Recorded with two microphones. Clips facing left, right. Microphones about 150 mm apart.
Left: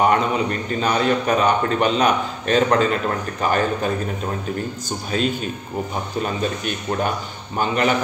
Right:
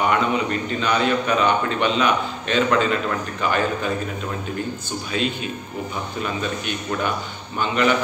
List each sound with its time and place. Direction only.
0.0 s a man's voice: 40° left (ahead or behind)
5.1 s a man's voice: 40° left (ahead or behind)